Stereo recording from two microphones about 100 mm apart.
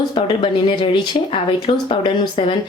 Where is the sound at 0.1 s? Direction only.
55° left (ahead or behind).